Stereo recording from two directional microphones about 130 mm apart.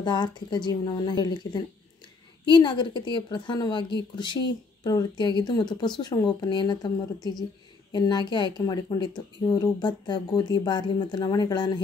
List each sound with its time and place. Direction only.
0.0 s speech: 35° left (ahead or behind)